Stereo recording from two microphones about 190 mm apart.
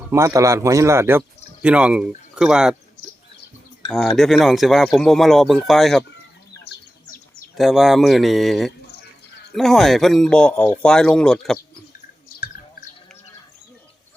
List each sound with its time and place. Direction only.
0.1 s speech: 15° right (ahead or behind)
3.9 s speech: centre (ahead or behind)
7.5 s speech: centre (ahead or behind)